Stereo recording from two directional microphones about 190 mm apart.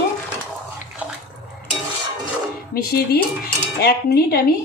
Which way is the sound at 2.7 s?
55° left (ahead or behind).